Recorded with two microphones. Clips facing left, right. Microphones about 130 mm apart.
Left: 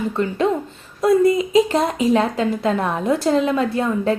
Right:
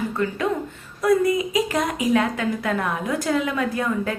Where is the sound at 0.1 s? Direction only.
25° left (ahead or behind).